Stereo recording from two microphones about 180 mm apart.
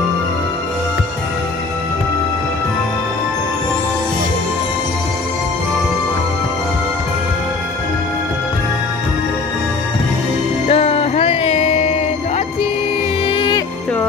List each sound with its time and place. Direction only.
10.7 s music: 35° left (ahead or behind)
13.3 s music: 30° left (ahead or behind)